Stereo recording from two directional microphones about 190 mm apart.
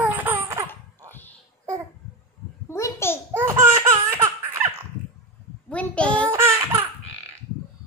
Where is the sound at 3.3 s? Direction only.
15° right (ahead or behind).